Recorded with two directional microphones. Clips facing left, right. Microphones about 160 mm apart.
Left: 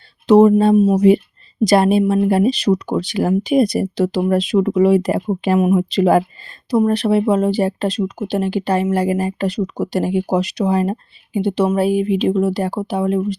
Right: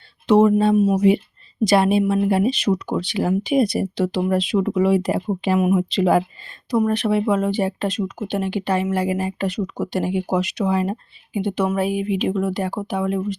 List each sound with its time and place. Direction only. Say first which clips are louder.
0.3 s speech: left 4 dB; 40° left (ahead or behind)
6.7 s speech: left 4 dB; 35° left (ahead or behind)